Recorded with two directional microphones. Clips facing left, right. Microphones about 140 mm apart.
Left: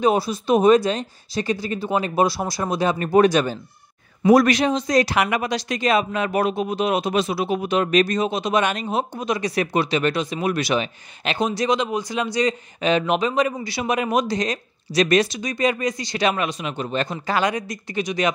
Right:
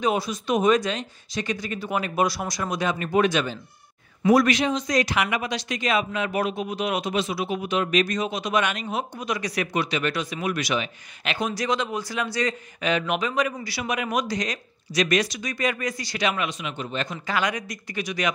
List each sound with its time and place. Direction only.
0.0 s a man's voice: 35° left (ahead or behind)
16.2 s speech: 35° left (ahead or behind)